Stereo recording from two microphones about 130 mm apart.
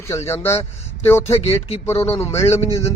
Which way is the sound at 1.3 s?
50° left (ahead or behind).